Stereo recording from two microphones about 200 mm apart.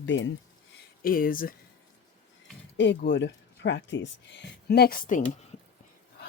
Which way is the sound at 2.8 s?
60° left (ahead or behind).